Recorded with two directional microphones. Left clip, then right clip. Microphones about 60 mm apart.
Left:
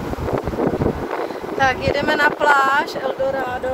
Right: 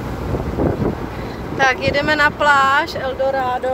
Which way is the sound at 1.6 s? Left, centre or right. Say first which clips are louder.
Right 2 dB; centre.